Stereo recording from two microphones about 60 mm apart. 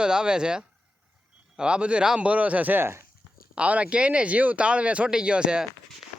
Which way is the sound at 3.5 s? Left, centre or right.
Right.